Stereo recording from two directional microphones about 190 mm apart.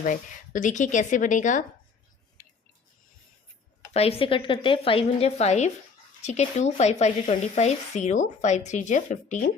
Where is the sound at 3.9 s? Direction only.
30° left (ahead or behind).